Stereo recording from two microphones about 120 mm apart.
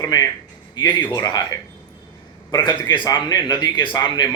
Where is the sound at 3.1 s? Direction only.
35° left (ahead or behind).